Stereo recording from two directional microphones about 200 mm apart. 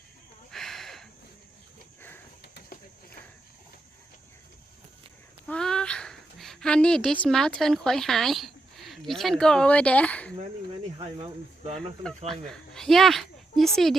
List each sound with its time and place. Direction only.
0.5 s a sound: centre (ahead or behind)
2.4 s pigeon: 50° left (ahead or behind)
5.5 s a woman's voice: 5° left (ahead or behind)
10.9 s speech: 30° right (ahead or behind)
12.3 s speech: centre (ahead or behind)